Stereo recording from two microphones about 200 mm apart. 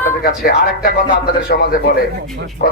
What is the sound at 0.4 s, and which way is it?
A man's voice, 50° left (ahead or behind).